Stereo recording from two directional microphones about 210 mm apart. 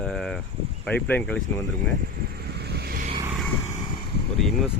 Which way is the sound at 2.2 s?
50° right (ahead or behind).